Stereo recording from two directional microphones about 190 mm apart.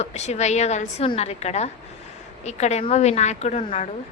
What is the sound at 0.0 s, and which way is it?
A woman's voice, 35° left (ahead or behind).